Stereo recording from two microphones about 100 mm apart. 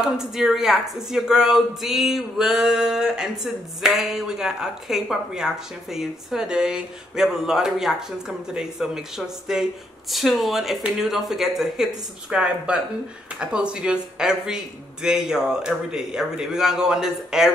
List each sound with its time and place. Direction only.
0.0 s speech: 5° right (ahead or behind)